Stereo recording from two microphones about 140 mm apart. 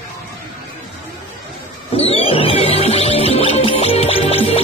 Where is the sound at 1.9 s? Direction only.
45° left (ahead or behind).